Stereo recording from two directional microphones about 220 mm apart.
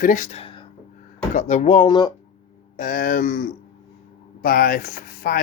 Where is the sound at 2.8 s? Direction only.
40° left (ahead or behind).